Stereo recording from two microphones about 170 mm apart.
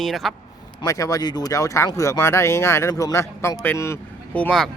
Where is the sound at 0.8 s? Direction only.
20° left (ahead or behind).